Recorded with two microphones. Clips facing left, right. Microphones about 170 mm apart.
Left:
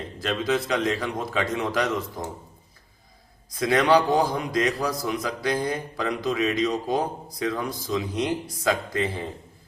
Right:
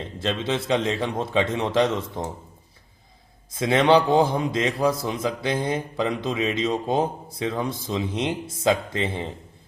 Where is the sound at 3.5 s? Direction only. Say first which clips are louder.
Right 2 dB; 25° right (ahead or behind).